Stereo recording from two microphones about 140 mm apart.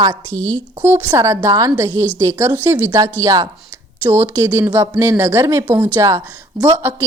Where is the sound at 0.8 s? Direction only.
15° right (ahead or behind).